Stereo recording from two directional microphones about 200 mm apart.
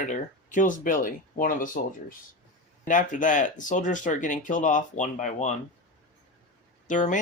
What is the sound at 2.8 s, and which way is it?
Speech, 40° left (ahead or behind).